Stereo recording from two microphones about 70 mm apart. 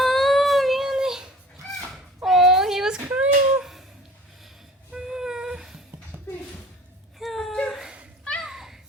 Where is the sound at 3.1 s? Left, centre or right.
Right.